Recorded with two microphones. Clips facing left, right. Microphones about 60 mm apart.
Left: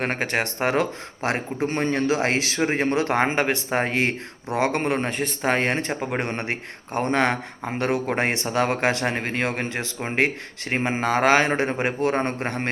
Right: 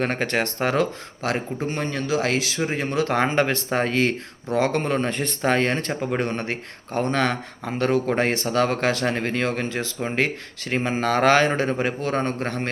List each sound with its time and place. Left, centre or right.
0.0 s speech: centre
1.7 s a man's voice: left
2.9 s speech: left
11.0 s speech: centre